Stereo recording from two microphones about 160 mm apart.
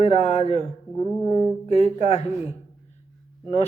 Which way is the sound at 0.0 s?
40° left (ahead or behind).